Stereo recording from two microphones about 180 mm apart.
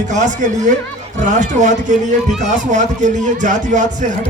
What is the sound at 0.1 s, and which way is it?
A man's voice, 45° right (ahead or behind).